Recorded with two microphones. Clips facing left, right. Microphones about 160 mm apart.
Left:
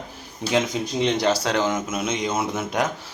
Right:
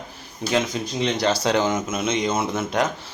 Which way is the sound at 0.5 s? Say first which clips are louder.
Left 1 dB; 15° left (ahead or behind).